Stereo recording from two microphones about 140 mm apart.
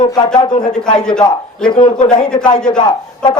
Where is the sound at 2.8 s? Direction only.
30° left (ahead or behind).